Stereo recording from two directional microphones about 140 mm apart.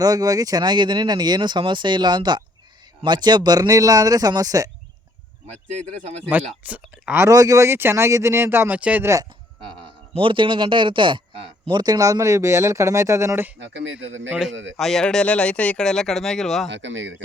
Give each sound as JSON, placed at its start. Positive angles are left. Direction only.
{"t": 0.0, "sound": "speech", "side_deg": -25}
{"t": 6.3, "sound": "speech", "side_deg": -10}
{"t": 10.2, "sound": "speech", "side_deg": -40}
{"t": 11.8, "sound": "speech", "side_deg": -25}
{"t": 14.3, "sound": "speech", "side_deg": -5}